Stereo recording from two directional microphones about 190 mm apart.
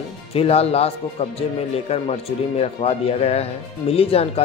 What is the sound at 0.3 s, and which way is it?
Speech, 30° left (ahead or behind).